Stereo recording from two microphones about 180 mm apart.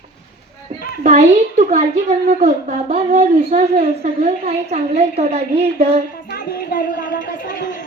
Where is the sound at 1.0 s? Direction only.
40° right (ahead or behind).